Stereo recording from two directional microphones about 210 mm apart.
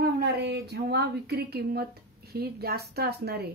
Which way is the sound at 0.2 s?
50° right (ahead or behind).